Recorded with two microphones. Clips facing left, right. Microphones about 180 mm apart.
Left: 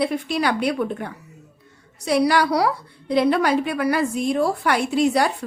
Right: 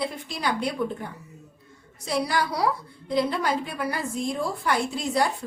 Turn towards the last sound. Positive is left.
turn(degrees=75)  # may be behind; listen again after turning